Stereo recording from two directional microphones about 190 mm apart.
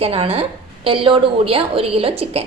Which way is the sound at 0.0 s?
30° right (ahead or behind).